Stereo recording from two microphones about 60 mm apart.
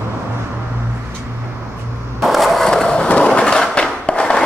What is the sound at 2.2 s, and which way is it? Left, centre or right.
Skateboard, centre.